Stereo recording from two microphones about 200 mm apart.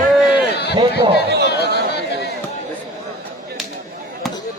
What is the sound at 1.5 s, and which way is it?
Chatter, 55° left (ahead or behind).